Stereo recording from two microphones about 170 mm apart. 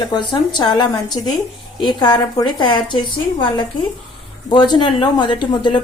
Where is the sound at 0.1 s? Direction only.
25° left (ahead or behind).